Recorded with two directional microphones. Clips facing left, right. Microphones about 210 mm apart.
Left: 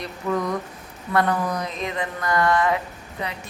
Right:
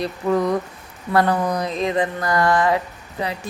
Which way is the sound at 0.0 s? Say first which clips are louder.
Right 5 dB; 35° right (ahead or behind).